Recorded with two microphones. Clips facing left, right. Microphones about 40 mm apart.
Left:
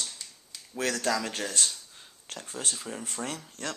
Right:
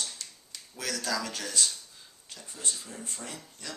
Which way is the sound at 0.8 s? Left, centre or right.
Left.